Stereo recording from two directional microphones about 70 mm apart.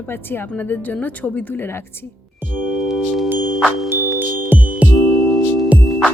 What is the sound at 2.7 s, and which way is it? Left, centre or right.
Music, centre.